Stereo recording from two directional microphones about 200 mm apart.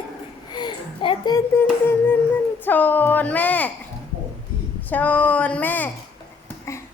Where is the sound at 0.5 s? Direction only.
20° left (ahead or behind).